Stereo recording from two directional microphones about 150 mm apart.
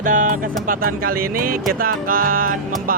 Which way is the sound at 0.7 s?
75° right (ahead or behind).